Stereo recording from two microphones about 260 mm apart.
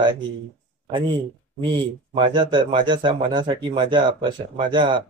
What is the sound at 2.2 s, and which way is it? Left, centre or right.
A man's voice, centre.